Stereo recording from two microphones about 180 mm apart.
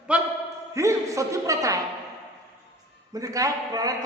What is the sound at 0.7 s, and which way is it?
Speech, 15° right (ahead or behind).